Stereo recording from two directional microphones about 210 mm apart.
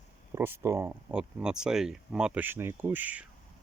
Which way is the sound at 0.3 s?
10° right (ahead or behind).